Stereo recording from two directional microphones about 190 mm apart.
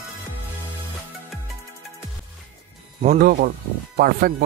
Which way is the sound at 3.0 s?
40° right (ahead or behind).